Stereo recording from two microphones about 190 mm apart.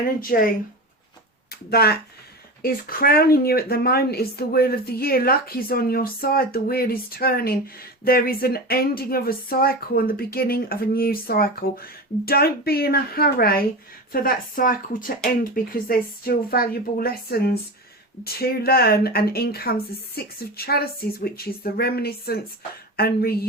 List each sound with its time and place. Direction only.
0.0 s speech: 50° left (ahead or behind)